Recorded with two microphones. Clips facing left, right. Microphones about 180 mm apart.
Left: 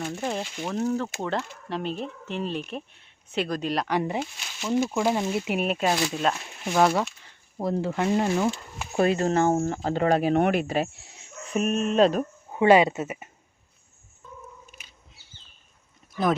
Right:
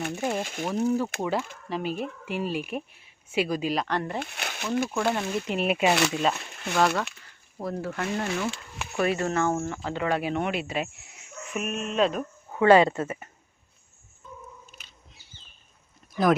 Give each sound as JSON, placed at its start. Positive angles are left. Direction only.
{"t": 0.0, "sound": "speech", "side_deg": -5}
{"t": 4.2, "sound": "speech", "side_deg": -60}
{"t": 4.9, "sound": "speech", "side_deg": 10}
{"t": 5.6, "sound": "speech", "side_deg": -10}
{"t": 5.9, "sound": "speech", "side_deg": -70}
{"t": 6.7, "sound": "speech", "side_deg": 10}
{"t": 9.0, "sound": "speech", "side_deg": 30}
{"t": 12.5, "sound": "speech", "side_deg": 20}
{"t": 16.1, "sound": "speech", "side_deg": -20}